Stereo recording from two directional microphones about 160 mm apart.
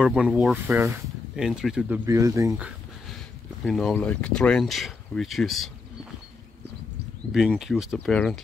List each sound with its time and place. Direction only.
0.0 s speech: 5° right (ahead or behind)
2.0 s speech: 20° right (ahead or behind)
3.6 s speech: centre (ahead or behind)
7.3 s speech: 5° right (ahead or behind)